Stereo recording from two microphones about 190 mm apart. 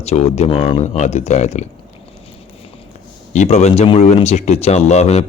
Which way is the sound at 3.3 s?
35° left (ahead or behind).